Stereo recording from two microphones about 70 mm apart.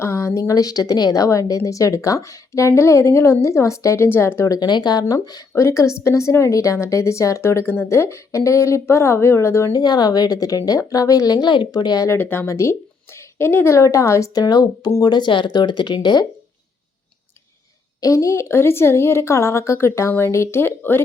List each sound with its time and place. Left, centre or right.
0.0 s a woman's voice: left
4.4 s a woman's voice: left
5.5 s a woman's voice: left
9.7 s a woman's voice: left
12.1 s speech: left
12.5 s a woman's voice: left
13.1 s a sound: left
13.7 s a woman's voice: left
14.3 s speech: left
15.1 s speech: left
18.0 s speech: left